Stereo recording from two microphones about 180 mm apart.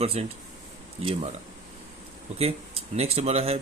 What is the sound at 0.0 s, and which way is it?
Speech, 35° right (ahead or behind).